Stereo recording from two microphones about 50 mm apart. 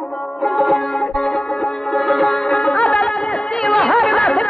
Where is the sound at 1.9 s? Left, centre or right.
Centre.